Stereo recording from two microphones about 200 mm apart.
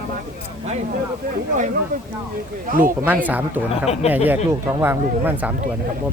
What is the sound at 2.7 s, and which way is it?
Speech, 45° right (ahead or behind).